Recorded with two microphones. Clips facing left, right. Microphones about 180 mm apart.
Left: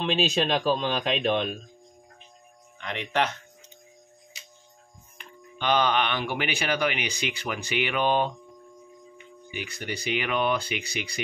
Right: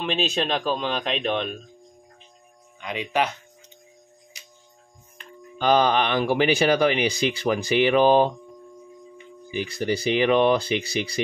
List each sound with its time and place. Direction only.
0.0 s speech: centre (ahead or behind)
2.8 s speech: 10° right (ahead or behind)
5.6 s speech: 35° right (ahead or behind)
9.5 s speech: 30° right (ahead or behind)